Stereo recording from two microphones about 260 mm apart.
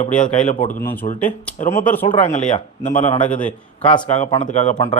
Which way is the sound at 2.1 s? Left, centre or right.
Left.